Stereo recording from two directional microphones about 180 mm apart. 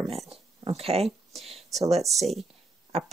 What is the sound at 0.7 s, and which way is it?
Speech, 35° right (ahead or behind).